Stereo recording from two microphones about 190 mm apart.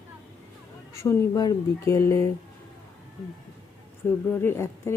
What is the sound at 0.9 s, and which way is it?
Speech, 15° left (ahead or behind).